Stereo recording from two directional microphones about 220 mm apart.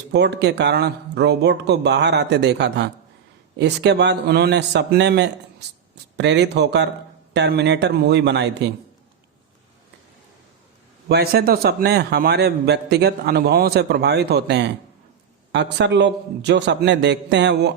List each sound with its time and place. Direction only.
0.1 s a man's voice: 50° right (ahead or behind)
11.1 s a man's voice: 45° right (ahead or behind)